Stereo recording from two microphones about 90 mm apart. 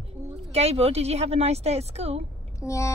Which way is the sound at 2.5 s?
35° left (ahead or behind).